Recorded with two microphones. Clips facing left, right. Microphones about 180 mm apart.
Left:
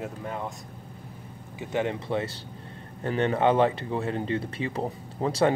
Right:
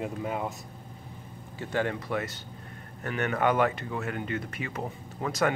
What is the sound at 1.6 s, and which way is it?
Speech, 20° left (ahead or behind).